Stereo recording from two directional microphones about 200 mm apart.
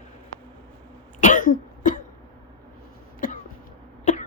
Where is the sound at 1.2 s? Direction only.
40° left (ahead or behind).